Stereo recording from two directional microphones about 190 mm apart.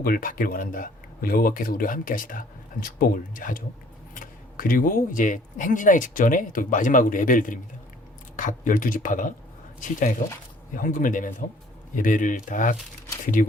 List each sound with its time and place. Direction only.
0.0 s speech: 50° left (ahead or behind)